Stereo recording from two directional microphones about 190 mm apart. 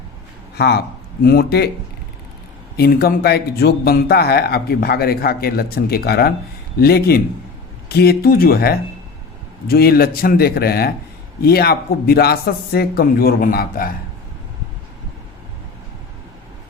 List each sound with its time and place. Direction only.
0.5 s speech: 60° left (ahead or behind)
2.7 s speech: 55° left (ahead or behind)